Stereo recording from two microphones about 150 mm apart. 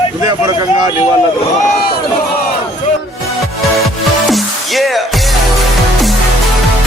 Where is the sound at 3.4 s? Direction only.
Centre (ahead or behind).